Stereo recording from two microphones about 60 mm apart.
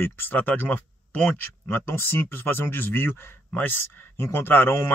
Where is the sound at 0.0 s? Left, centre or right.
Left.